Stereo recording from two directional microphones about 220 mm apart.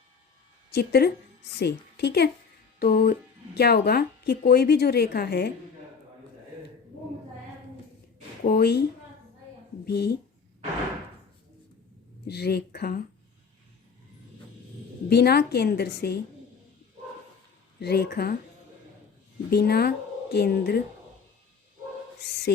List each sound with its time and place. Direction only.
0.7 s a woman's voice: 45° left (ahead or behind)
8.4 s speech: 45° left (ahead or behind)
9.8 s speech: 45° left (ahead or behind)
12.3 s speech: 45° left (ahead or behind)
15.1 s speech: 45° left (ahead or behind)
17.7 s speech: 45° left (ahead or behind)
19.5 s speech: 45° left (ahead or behind)
22.2 s speech: 50° left (ahead or behind)